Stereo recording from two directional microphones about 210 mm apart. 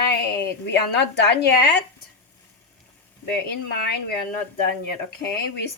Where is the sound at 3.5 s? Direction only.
50° left (ahead or behind).